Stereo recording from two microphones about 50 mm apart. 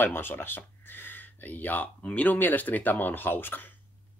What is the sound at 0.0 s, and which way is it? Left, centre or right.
Speech, left.